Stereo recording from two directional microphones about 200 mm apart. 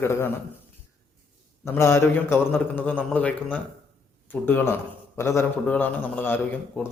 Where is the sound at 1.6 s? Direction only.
10° left (ahead or behind).